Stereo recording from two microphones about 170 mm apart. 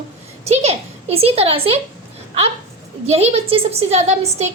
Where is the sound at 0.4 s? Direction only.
40° right (ahead or behind).